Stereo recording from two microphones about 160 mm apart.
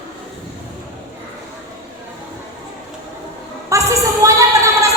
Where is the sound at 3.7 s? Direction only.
20° right (ahead or behind).